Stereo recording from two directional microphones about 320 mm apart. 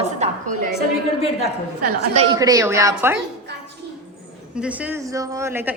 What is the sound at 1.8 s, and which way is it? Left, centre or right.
A woman's voice, centre.